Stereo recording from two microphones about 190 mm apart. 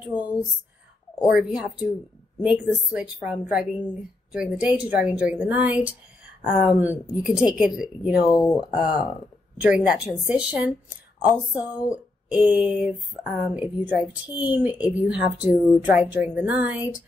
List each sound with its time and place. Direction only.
1.3 s a woman's voice: 5° right (ahead or behind)
8.4 s speech: 20° left (ahead or behind)
8.7 s a woman's voice: 5° right (ahead or behind)